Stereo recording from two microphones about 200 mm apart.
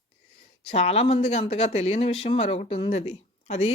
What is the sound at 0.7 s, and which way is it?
Speech, 30° left (ahead or behind).